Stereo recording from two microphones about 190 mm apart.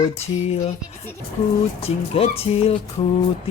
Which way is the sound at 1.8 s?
30° left (ahead or behind).